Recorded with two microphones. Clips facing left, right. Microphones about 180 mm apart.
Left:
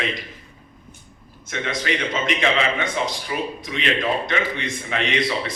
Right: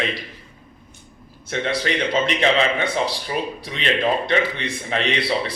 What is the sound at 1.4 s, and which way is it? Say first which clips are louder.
A man's voice: right 3 dB; 30° right (ahead or behind).